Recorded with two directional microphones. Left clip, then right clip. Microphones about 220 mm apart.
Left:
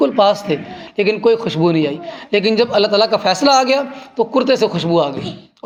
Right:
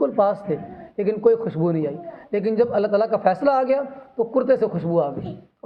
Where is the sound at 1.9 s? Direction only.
50° left (ahead or behind).